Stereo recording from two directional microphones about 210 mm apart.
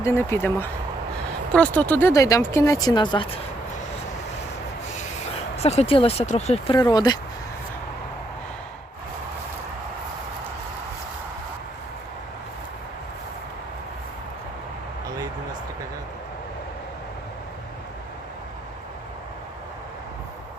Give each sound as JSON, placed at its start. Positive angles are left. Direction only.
{"t": 0.0, "sound": "speech", "side_deg": 10}
{"t": 4.9, "sound": "rub", "side_deg": 35}
{"t": 5.5, "sound": "speech", "side_deg": 30}
{"t": 6.7, "sound": "speech", "side_deg": 20}